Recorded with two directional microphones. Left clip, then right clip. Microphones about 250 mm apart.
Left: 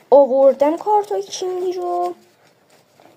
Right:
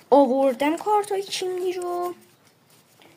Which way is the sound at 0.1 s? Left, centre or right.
Right.